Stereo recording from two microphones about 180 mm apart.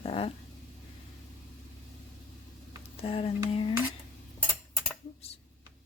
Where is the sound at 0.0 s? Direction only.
35° left (ahead or behind).